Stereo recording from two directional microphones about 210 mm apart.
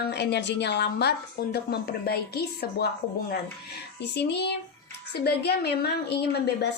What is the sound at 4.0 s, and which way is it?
A woman's voice, 55° left (ahead or behind).